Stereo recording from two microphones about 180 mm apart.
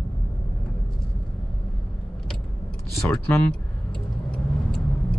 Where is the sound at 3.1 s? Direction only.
5° left (ahead or behind).